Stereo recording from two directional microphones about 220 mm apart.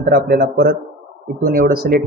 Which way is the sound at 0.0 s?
40° right (ahead or behind).